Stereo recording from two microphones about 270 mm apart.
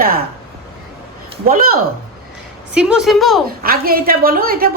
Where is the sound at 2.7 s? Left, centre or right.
Centre.